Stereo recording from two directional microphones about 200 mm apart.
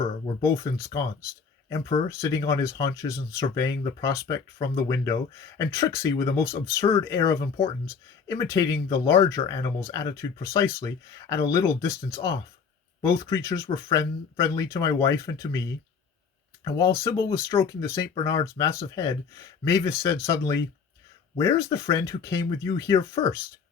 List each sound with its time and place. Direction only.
0.4 s speech: 15° left (ahead or behind)
2.2 s speech: 15° left (ahead or behind)